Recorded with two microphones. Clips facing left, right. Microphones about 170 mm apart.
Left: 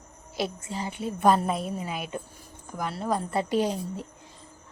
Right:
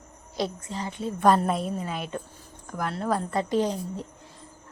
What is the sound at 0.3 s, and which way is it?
A woman's voice, 5° left (ahead or behind).